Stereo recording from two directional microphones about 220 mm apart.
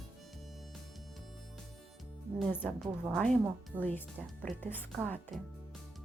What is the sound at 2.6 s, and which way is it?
A woman's voice, 5° right (ahead or behind).